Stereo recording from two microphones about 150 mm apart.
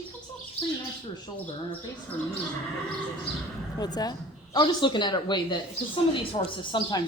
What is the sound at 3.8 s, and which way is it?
Speech, 25° left (ahead or behind).